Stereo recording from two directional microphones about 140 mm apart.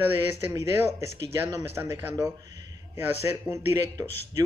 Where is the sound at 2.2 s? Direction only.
25° right (ahead or behind).